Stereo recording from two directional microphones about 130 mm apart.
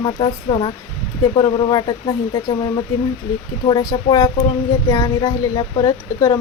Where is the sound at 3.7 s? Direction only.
30° left (ahead or behind).